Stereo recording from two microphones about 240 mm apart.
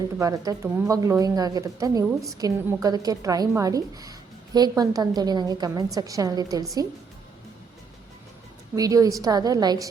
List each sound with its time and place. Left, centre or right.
0.2 s a woman's voice: centre
8.7 s a woman's voice: centre